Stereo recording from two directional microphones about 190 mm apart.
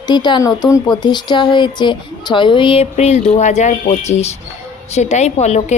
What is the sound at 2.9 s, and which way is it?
A woman's voice, 35° left (ahead or behind).